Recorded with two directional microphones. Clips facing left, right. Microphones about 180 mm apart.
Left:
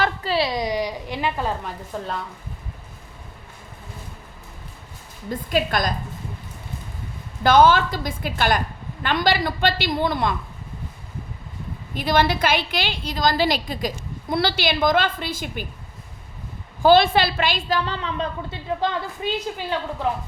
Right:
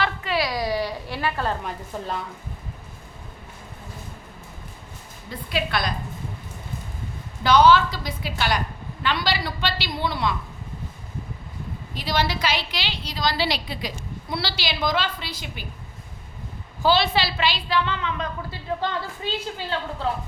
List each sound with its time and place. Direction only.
0.0 s a sound: 35° left (ahead or behind); by 1.5 s 15° left (ahead or behind)
1.9 s speech: 5° right (ahead or behind)
5.3 s a woman's voice: 45° left (ahead or behind)
7.4 s a woman's voice: 50° left (ahead or behind)
11.9 s a woman's voice: 50° left (ahead or behind)
16.8 s a woman's voice: 50° left (ahead or behind); by 18.3 s 35° left (ahead or behind)
18.5 s a woman's voice: 15° left (ahead or behind)